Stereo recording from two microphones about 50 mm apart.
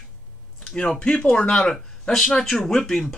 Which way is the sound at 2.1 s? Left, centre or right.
Centre.